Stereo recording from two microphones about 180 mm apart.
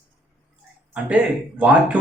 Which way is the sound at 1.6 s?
5° right (ahead or behind).